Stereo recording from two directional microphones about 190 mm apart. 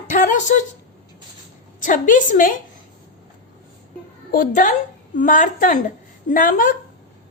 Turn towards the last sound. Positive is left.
turn(degrees=45)  # may be behind; listen again after turning